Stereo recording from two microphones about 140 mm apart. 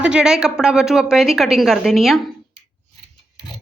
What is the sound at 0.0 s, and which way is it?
A woman's voice, 5° right (ahead or behind).